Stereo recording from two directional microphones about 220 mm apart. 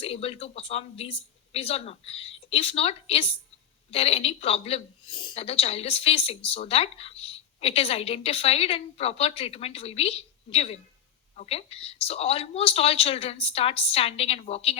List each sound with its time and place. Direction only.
0.0 s a woman's voice: 25° left (ahead or behind)